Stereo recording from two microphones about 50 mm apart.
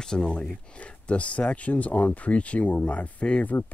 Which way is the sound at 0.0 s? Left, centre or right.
Centre.